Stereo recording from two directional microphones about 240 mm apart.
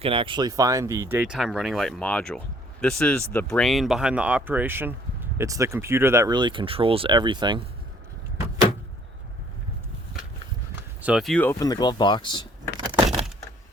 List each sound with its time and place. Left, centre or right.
0.0 s speech: right
11.0 s speech: centre
13.1 s a sound: centre